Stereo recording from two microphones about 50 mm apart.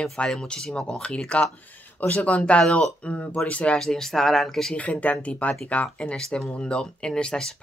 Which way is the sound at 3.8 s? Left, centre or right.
Centre.